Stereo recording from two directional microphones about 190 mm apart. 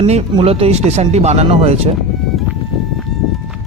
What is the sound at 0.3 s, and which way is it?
Speech, 30° right (ahead or behind).